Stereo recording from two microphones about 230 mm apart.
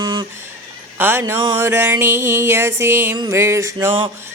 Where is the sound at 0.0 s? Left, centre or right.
Centre.